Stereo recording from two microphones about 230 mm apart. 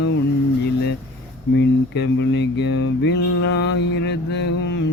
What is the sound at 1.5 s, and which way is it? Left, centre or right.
Mantra, left.